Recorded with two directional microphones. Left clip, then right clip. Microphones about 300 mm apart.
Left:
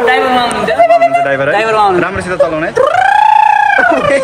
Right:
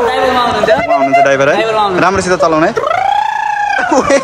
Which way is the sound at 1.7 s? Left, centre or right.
Left.